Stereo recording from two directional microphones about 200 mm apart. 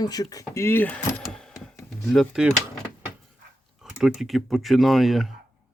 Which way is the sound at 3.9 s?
Centre (ahead or behind).